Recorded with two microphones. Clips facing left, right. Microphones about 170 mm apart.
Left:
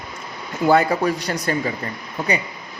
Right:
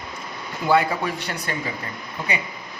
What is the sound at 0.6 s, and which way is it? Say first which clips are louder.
Speech: left 4 dB; 45° left (ahead or behind).